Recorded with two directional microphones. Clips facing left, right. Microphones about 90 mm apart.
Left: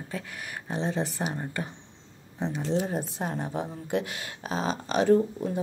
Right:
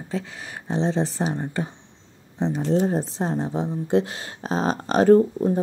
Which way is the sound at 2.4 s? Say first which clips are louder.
Right 7 dB; 35° right (ahead or behind).